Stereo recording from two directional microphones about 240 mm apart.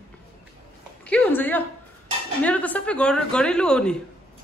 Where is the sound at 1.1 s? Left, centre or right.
Centre.